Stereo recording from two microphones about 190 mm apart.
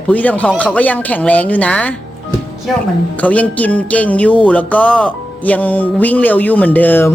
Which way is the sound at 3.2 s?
5° left (ahead or behind).